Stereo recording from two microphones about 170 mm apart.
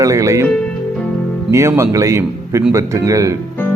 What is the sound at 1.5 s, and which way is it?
Speech, 15° right (ahead or behind).